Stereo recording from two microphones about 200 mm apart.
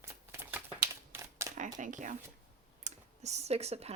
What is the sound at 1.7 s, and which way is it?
Speech, 40° right (ahead or behind).